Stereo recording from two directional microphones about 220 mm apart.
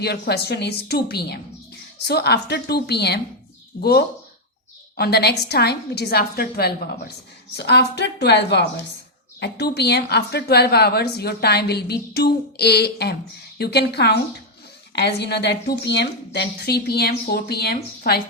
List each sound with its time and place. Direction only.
0.0 s a woman's voice: 45° left (ahead or behind)